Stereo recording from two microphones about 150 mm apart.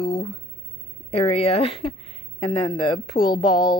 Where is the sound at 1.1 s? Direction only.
40° left (ahead or behind).